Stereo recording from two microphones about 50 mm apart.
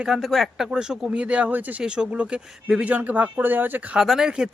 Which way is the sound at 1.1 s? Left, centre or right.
Right.